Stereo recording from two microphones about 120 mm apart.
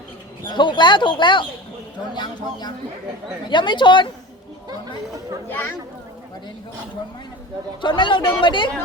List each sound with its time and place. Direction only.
0.4 s speech: 40° left (ahead or behind)
5.5 s speech: 15° left (ahead or behind)
7.8 s speech: 40° left (ahead or behind)